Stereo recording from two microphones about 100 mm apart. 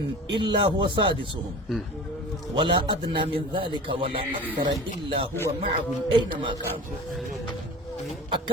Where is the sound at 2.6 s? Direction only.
50° right (ahead or behind).